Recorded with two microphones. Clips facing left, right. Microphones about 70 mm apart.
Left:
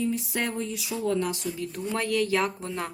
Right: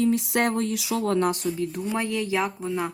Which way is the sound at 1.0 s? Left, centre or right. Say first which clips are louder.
Right 3 dB; right.